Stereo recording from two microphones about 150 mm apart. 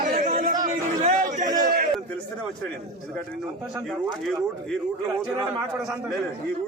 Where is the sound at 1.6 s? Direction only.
90° right.